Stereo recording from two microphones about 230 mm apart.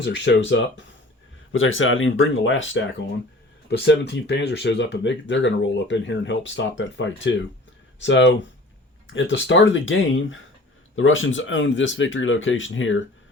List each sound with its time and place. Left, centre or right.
0.0 s speech: left